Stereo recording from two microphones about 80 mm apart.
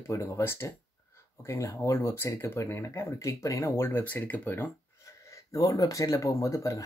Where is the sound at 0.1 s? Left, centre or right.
Left.